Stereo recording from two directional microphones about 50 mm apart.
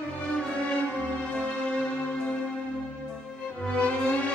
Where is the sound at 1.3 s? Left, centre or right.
Centre.